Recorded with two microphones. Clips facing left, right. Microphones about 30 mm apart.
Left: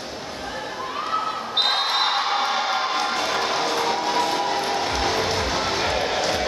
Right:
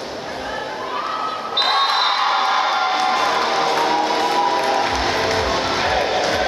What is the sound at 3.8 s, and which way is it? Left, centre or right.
Music, right.